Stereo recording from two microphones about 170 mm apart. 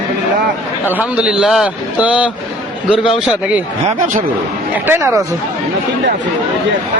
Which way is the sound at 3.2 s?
5° right (ahead or behind).